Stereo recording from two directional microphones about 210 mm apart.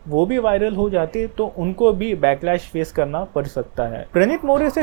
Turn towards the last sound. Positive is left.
turn(degrees=-20)  # may be behind; listen again after turning